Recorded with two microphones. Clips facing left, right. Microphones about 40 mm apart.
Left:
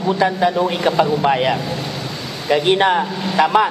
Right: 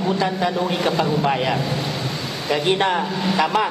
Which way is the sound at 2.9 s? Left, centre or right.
Centre.